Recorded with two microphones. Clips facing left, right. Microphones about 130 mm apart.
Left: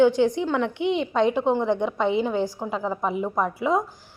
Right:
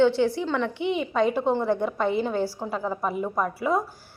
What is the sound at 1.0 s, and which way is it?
Speech, 5° right (ahead or behind).